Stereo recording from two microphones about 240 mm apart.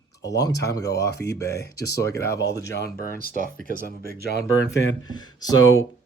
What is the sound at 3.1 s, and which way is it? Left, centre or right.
Speech, right.